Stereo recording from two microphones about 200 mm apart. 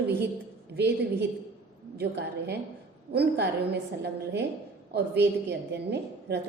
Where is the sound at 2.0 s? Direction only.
55° right (ahead or behind).